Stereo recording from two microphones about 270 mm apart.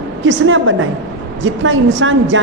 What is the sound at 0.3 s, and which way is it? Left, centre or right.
A woman's voice, right.